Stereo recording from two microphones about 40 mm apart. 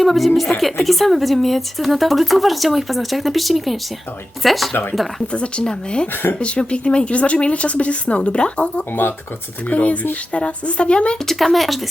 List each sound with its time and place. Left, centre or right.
0.0 s speech: centre
5.3 s speech: left
11.3 s speech: centre